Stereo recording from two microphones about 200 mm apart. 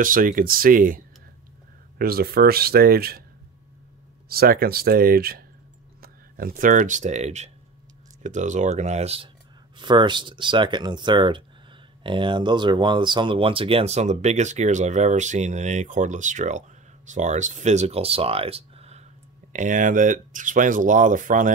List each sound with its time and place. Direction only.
0.0 s speech: 45° right (ahead or behind)
4.3 s speech: 50° right (ahead or behind)